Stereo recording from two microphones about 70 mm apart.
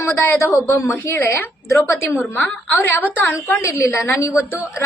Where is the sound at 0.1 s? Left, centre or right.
Left.